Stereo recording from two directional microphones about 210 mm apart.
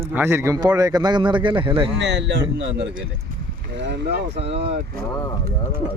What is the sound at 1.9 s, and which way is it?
Speech, 55° right (ahead or behind).